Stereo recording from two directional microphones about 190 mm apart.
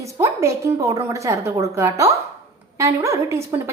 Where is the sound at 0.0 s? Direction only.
15° right (ahead or behind).